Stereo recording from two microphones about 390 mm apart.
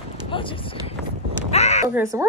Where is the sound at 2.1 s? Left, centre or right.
Centre.